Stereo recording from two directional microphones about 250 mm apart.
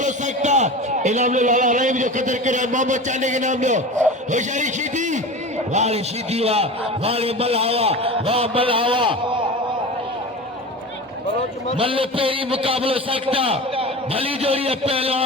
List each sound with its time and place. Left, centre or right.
0.0 s a man's voice: right
11.8 s a man's voice: right